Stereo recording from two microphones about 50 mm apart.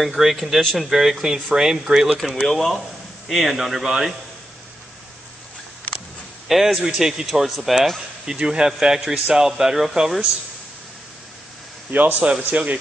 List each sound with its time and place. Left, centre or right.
0.0 s speech: centre
6.5 s speech: centre
8.3 s speech: centre
11.9 s speech: right